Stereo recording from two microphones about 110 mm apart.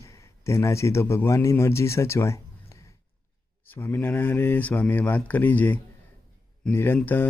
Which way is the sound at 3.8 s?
20° left (ahead or behind).